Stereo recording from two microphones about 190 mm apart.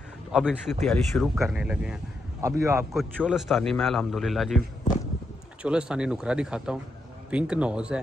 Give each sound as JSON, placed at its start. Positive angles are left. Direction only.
{"t": 0.3, "sound": "a man's voice", "side_deg": -5}
{"t": 2.9, "sound": "a man's voice", "side_deg": 0}
{"t": 5.6, "sound": "a man's voice", "side_deg": -5}